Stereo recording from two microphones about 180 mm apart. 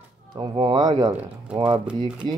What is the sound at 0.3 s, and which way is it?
Speech, 25° right (ahead or behind).